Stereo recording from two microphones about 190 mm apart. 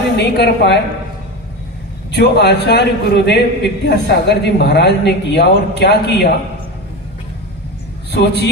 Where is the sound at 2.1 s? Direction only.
60° left (ahead or behind).